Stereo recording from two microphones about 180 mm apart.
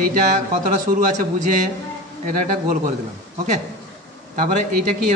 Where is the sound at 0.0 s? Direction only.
50° right (ahead or behind).